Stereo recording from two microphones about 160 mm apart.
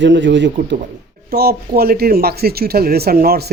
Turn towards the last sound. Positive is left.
turn(degrees=-80)